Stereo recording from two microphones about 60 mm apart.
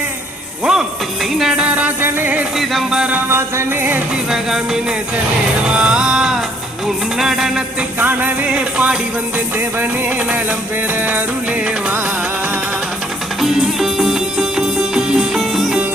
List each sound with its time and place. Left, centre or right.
0.6 s music: centre
1.6 s music: right
2.0 s music: right
2.6 s music: centre
3.2 s music: right
4.3 s music: centre
7.9 s music: right
8.4 s a sound: centre
13.4 s music: centre